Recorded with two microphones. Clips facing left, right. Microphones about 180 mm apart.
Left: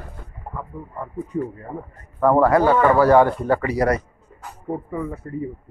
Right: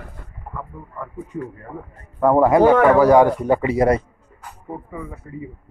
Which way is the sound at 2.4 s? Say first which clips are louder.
Right 4 dB; 20° right (ahead or behind).